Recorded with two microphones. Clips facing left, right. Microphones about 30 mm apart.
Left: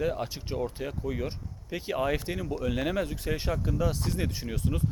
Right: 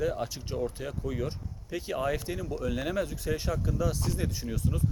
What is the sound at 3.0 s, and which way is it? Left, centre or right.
Speech, left.